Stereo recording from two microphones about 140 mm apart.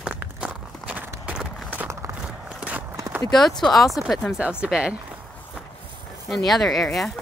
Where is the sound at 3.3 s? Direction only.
Centre (ahead or behind).